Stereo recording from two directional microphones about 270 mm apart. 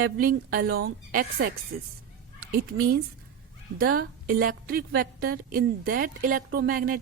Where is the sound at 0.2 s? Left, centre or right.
Right.